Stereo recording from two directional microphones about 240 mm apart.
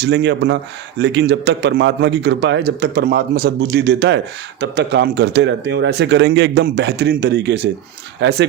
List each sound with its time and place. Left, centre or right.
0.0 s a man's voice: right